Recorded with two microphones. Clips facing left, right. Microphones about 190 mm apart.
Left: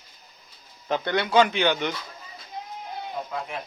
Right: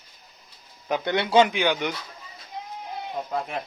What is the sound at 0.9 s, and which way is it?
Speech, 20° right (ahead or behind).